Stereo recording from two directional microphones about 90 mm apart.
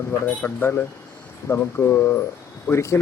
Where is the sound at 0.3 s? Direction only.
20° left (ahead or behind).